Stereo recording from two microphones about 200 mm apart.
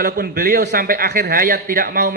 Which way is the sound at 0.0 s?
50° right (ahead or behind).